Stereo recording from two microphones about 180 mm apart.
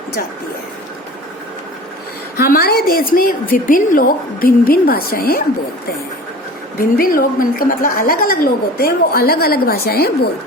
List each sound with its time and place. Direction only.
2.4 s a woman's voice: 60° left (ahead or behind)
6.7 s a woman's voice: 55° left (ahead or behind)